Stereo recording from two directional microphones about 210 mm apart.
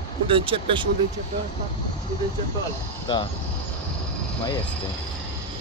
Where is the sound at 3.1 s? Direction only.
20° left (ahead or behind).